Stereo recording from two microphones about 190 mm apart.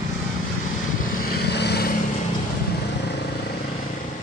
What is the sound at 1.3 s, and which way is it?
Vehicle, 60° left (ahead or behind).